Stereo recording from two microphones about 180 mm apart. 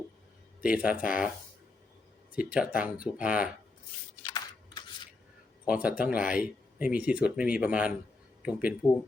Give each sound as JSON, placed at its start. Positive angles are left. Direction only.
{"t": 0.6, "sound": "speech", "side_deg": -5}
{"t": 2.3, "sound": "speech", "side_deg": -5}
{"t": 4.3, "sound": "a sound", "side_deg": 25}
{"t": 5.6, "sound": "speech", "side_deg": -5}